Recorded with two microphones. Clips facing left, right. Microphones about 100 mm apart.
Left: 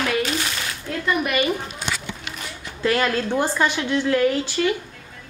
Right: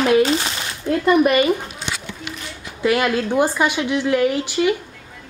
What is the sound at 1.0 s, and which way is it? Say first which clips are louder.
Speech: right 8 dB; 40° right (ahead or behind).